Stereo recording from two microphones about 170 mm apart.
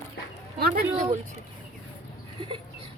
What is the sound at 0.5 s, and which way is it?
Speech, 65° right (ahead or behind).